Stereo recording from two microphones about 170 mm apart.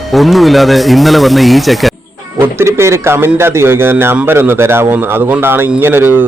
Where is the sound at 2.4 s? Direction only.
15° right (ahead or behind).